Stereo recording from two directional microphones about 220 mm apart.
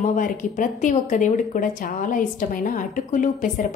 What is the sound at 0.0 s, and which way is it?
Speech, 35° left (ahead or behind).